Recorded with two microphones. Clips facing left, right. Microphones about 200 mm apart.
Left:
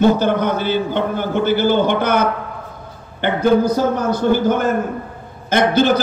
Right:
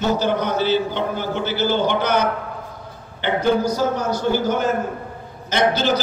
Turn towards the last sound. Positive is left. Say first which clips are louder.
# left 4 dB
turn(degrees=55)  # may be behind; listen again after turning